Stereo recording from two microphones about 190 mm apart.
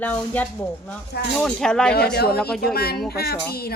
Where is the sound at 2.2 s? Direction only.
55° left (ahead or behind).